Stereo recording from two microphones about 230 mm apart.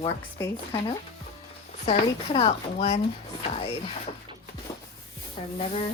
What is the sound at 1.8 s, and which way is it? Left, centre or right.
Speech, left.